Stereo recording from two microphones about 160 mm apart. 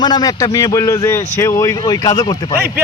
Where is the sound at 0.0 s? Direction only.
25° left (ahead or behind).